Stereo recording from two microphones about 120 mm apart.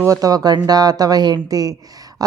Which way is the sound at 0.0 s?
30° right (ahead or behind).